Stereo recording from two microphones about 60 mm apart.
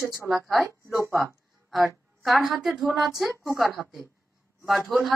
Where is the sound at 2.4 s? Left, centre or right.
Centre.